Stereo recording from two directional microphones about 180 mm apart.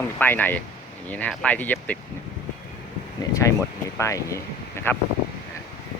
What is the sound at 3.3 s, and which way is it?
Speech, 15° left (ahead or behind).